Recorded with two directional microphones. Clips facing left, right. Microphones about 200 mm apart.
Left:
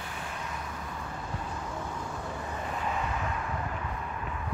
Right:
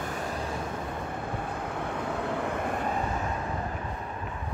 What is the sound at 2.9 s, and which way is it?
Vehicle, 40° right (ahead or behind).